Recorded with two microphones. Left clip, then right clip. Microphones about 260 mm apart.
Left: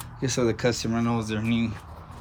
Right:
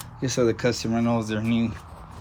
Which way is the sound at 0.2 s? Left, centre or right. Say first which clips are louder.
Right 2 dB; centre.